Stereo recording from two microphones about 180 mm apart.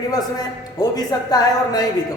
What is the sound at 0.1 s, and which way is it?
A woman's voice, 20° left (ahead or behind).